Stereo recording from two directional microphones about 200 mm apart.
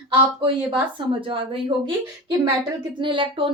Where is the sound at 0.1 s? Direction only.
25° right (ahead or behind).